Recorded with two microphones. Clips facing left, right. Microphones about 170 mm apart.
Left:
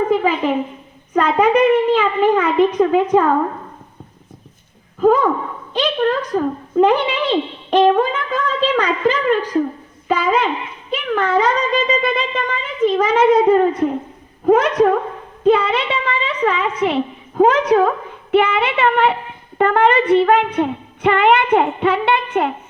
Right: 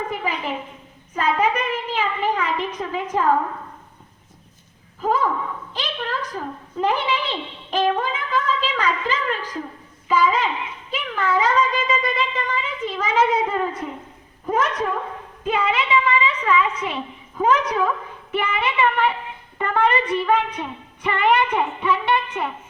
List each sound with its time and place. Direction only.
0.1 s a sound: 65° left (ahead or behind)
1.1 s a child's voice: 65° left (ahead or behind)
4.9 s a woman's voice: 60° left (ahead or behind)
7.9 s a woman's voice: 55° left (ahead or behind)